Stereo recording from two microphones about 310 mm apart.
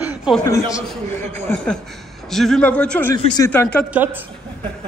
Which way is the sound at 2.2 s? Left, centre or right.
Centre.